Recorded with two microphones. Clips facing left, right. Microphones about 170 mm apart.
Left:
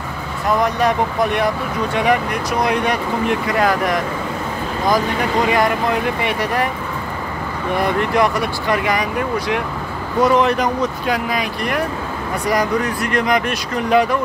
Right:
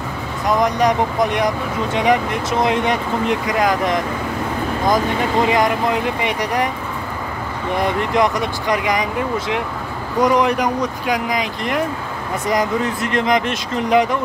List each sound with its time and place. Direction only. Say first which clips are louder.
0.5 s speech: right 1 dB; 15° right (ahead or behind)
5.5 s speech: even; 20° right (ahead or behind)
7.7 s speech: left 1 dB; 20° right (ahead or behind)
10.2 s speech: left 1 dB; 15° right (ahead or behind)